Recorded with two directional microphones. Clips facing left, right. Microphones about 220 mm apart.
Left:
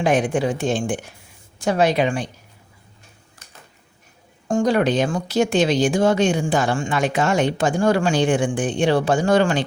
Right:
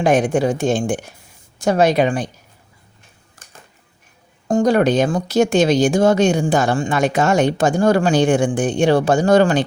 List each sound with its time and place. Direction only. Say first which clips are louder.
0.0 s speech: right 3 dB; 45° right (ahead or behind)
4.4 s speech: right 3 dB; 40° right (ahead or behind)